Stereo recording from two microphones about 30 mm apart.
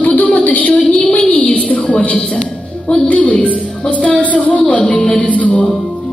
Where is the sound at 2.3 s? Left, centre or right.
Left.